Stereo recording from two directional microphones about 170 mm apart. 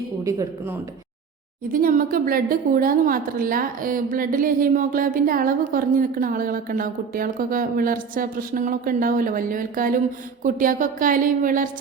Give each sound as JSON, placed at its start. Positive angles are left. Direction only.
{"t": 0.3, "sound": "speech", "side_deg": -15}
{"t": 1.7, "sound": "a woman's voice", "side_deg": -55}